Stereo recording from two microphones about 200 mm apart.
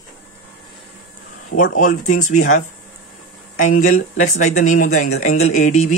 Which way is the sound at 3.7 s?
90° left.